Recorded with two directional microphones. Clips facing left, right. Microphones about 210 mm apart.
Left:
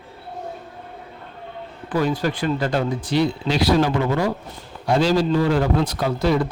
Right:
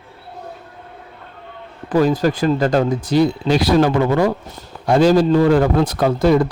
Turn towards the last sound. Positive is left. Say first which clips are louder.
# right 6 dB
turn(degrees=-50)  # may be behind; listen again after turning